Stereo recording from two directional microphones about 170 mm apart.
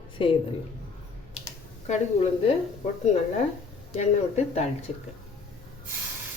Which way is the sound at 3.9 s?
40° left (ahead or behind).